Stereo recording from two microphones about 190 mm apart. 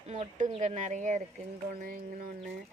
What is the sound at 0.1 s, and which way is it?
Speech, 35° right (ahead or behind).